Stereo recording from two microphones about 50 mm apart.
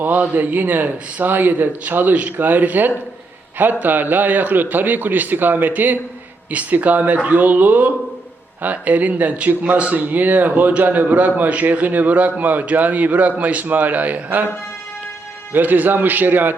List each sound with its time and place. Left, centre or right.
0.0 s speech: right
15.5 s speech: right